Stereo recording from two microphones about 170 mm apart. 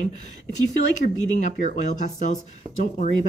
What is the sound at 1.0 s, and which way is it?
Speech, 45° left (ahead or behind).